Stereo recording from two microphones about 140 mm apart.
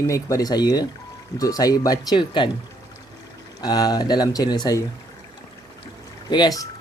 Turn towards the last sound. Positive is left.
turn(degrees=30)  # may be behind; listen again after turning